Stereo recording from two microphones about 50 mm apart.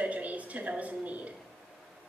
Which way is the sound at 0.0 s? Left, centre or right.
Right.